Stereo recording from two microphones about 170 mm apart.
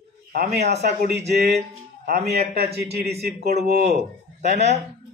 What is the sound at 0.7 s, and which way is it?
Speech, 40° right (ahead or behind).